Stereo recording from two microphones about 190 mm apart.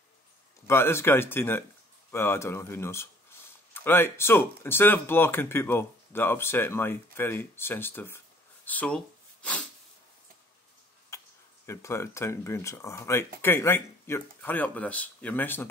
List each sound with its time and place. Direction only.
0.7 s speech: 15° left (ahead or behind)
8.6 s a sound: 5° left (ahead or behind)
11.1 s tick-tock: 15° left (ahead or behind)
11.6 s speech: 15° left (ahead or behind)